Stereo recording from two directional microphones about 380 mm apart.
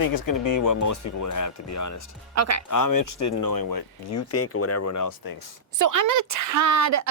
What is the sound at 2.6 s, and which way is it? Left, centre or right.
Speech, left.